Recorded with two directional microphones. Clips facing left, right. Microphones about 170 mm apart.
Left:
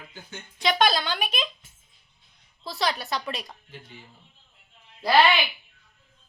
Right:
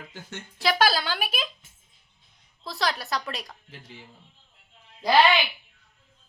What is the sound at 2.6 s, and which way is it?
Speech, centre (ahead or behind).